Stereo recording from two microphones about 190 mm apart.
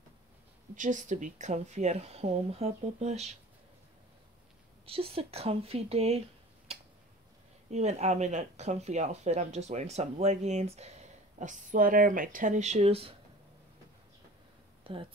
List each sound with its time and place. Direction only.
0.7 s speech: 40° right (ahead or behind)
4.8 s speech: 30° right (ahead or behind)
7.7 s speech: 35° right (ahead or behind)
14.8 s a sound: 30° right (ahead or behind)